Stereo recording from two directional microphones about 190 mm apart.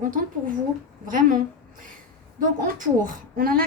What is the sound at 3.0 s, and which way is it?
Speech, 50° right (ahead or behind).